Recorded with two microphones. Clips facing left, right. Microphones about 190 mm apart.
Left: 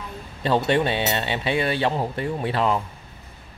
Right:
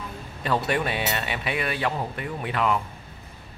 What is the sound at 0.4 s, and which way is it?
A man's voice, 30° left (ahead or behind).